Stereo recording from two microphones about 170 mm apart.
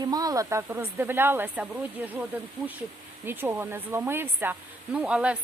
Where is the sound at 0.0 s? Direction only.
20° right (ahead or behind).